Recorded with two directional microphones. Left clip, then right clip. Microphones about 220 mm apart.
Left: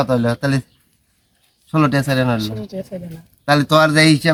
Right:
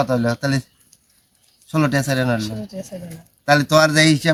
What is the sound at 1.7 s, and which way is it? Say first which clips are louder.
Speech: left 3 dB; centre (ahead or behind).